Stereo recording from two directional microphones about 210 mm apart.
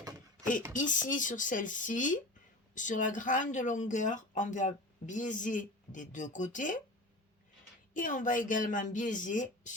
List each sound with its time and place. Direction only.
0.7 s speech: 40° left (ahead or behind)
7.9 s speech: 40° left (ahead or behind)